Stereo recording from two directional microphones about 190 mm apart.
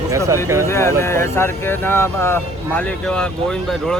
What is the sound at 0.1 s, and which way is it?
Speech, 15° right (ahead or behind).